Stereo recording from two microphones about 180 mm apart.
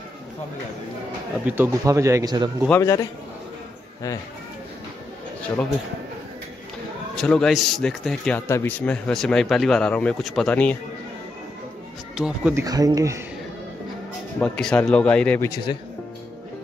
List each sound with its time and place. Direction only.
1.4 s speech: 10° right (ahead or behind)
2.7 s a man's voice: 15° left (ahead or behind)
7.2 s speech: 5° left (ahead or behind)
12.2 s speech: 10° right (ahead or behind)
12.6 s speech: 20° right (ahead or behind)
14.4 s a man's voice: 5° left (ahead or behind)
15.5 s speech: 25° left (ahead or behind)